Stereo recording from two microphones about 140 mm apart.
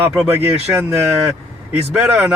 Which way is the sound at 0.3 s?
15° right (ahead or behind).